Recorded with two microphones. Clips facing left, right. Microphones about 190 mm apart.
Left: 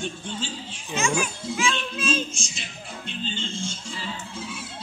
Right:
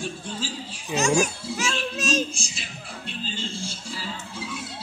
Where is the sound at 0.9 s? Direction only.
40° right (ahead or behind).